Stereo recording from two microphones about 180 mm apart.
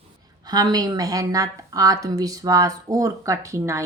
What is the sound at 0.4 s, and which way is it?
A woman's voice, 20° right (ahead or behind).